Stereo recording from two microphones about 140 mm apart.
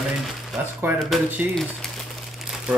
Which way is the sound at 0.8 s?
15° right (ahead or behind).